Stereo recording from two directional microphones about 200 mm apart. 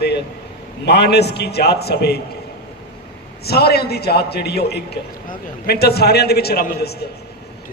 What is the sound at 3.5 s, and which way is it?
A man's voice, 50° left (ahead or behind).